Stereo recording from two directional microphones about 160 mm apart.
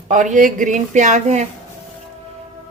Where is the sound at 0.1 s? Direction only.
50° right (ahead or behind).